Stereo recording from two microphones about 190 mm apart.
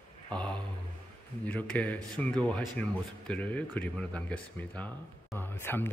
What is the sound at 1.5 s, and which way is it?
Speech, 5° left (ahead or behind).